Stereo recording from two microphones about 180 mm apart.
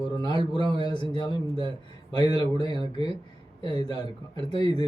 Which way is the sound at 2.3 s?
30° right (ahead or behind).